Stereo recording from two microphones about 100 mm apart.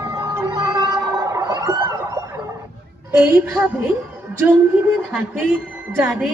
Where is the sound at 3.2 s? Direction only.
20° right (ahead or behind).